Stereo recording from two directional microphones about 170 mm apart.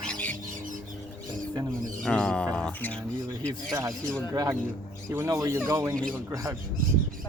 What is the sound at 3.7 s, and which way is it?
Speech, 15° right (ahead or behind).